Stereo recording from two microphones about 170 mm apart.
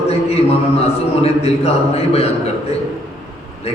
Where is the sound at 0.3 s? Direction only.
35° left (ahead or behind).